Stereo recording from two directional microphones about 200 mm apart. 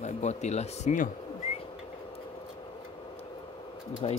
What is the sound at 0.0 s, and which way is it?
Speech, 35° left (ahead or behind).